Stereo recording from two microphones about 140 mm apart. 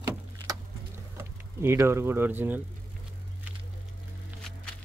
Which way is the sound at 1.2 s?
20° right (ahead or behind).